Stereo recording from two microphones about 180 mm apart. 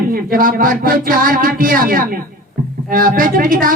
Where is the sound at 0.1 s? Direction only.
55° right (ahead or behind).